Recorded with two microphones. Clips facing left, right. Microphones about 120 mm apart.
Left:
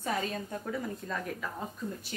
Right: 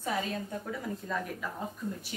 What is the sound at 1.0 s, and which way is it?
Speech, 5° right (ahead or behind).